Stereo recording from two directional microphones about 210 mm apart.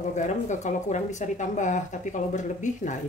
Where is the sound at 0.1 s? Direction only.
35° left (ahead or behind).